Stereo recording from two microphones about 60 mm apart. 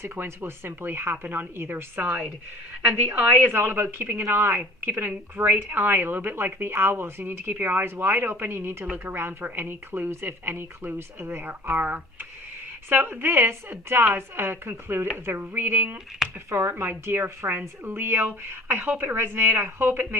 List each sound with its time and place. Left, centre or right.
0.0 s a woman's voice: right
3.4 s a woman's voice: right
8.8 s a woman's voice: right